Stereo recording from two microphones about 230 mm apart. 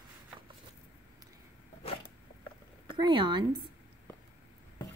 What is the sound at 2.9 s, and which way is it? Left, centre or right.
Speech, centre.